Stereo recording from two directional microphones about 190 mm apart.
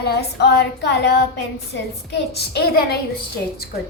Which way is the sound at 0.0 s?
60° left (ahead or behind).